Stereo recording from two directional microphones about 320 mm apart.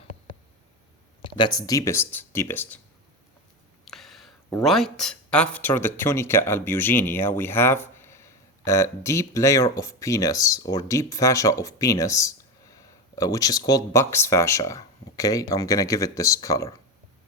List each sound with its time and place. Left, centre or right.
1.2 s speech: centre
3.8 s speech: centre